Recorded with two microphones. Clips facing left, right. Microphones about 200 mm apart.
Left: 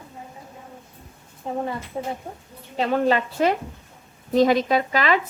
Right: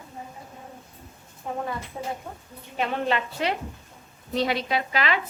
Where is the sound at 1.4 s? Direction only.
25° left (ahead or behind).